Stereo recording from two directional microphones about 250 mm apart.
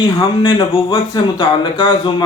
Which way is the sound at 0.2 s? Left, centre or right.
Left.